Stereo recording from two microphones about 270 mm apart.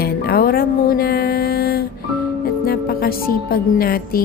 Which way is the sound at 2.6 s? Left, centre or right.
Left.